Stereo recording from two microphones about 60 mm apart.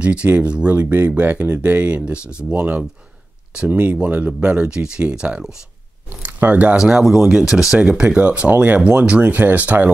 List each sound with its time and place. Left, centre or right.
0.0 s speech: centre
6.0 s speech: right
6.8 s speech: centre; by 9.8 s right